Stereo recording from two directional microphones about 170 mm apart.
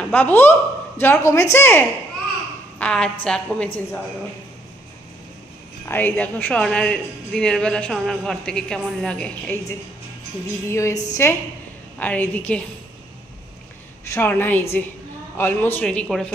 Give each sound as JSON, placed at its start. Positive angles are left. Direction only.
{"t": 0.1, "sound": "a woman's voice", "side_deg": 10}
{"t": 5.9, "sound": "speech", "side_deg": 10}
{"t": 10.7, "sound": "a woman's voice", "side_deg": 20}
{"t": 14.1, "sound": "a woman's voice", "side_deg": 10}